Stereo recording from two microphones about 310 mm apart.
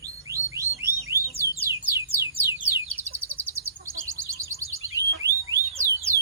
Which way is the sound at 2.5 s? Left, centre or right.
Centre.